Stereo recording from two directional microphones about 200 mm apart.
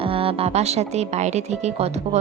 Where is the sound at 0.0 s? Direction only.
25° right (ahead or behind).